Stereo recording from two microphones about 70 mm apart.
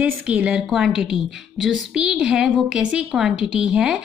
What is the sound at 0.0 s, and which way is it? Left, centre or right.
A woman's voice, centre.